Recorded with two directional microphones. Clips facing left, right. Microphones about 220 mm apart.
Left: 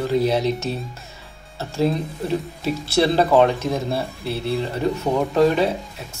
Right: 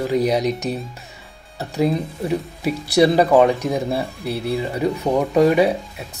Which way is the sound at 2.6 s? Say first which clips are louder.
Right 4 dB; 15° right (ahead or behind).